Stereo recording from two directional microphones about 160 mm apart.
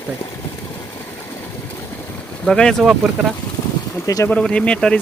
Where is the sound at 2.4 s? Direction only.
5° left (ahead or behind).